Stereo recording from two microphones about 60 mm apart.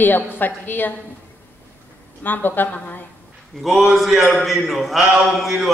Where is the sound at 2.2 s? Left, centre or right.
Left.